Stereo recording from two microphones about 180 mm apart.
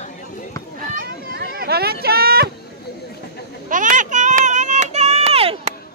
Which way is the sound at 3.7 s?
45° right (ahead or behind).